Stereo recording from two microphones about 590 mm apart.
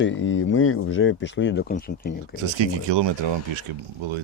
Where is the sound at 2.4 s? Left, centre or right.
Right.